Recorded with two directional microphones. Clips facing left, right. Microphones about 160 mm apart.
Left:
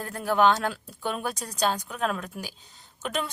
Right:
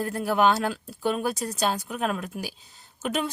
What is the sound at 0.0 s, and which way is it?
Speech, 10° right (ahead or behind).